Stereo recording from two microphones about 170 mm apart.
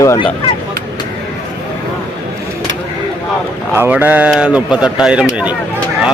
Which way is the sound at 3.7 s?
10° right (ahead or behind).